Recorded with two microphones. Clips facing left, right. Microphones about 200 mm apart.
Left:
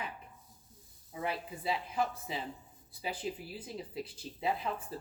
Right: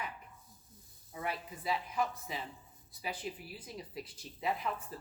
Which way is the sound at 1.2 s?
25° left (ahead or behind).